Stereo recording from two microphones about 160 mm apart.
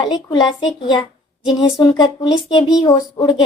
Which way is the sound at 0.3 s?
25° left (ahead or behind).